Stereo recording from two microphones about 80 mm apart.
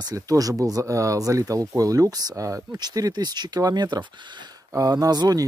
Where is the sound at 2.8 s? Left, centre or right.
Right.